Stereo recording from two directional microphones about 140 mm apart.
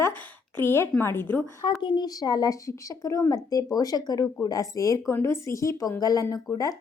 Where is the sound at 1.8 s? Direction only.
30° left (ahead or behind).